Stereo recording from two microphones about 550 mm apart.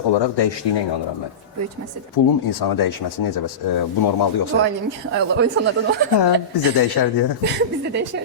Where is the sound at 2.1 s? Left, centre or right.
Left.